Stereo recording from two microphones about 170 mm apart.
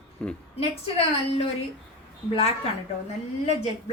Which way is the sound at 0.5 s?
35° left (ahead or behind).